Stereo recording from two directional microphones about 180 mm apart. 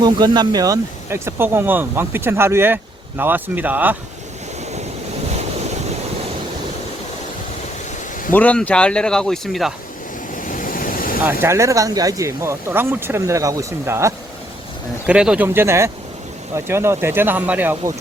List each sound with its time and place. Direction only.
0.0 s speech: 25° right (ahead or behind)
8.3 s speech: 10° left (ahead or behind)
10.3 s vehicle: 50° left (ahead or behind)
11.4 s speech: 15° right (ahead or behind)
15.0 s speech: 5° right (ahead or behind)